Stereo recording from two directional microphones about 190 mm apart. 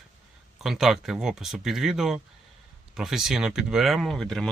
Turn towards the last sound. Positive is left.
turn(degrees=0)  # may be behind; listen again after turning